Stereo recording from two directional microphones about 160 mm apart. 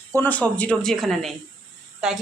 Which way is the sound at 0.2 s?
10° left (ahead or behind).